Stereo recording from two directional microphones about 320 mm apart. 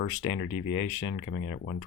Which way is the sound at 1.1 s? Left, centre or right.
Left.